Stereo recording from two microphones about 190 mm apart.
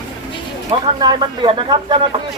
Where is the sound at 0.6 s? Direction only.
20° right (ahead or behind).